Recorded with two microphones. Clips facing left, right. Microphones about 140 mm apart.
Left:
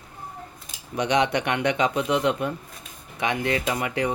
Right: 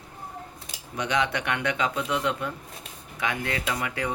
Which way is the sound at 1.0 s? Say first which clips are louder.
Left 5 dB; 20° left (ahead or behind).